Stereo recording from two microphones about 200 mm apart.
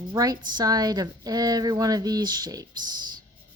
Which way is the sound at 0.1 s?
20° right (ahead or behind).